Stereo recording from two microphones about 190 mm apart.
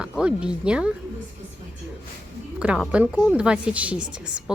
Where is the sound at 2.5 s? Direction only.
5° right (ahead or behind).